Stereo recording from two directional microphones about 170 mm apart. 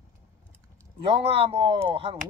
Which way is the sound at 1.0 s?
35° right (ahead or behind).